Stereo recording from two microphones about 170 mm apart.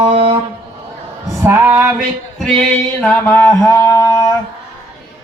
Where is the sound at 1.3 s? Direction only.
15° right (ahead or behind).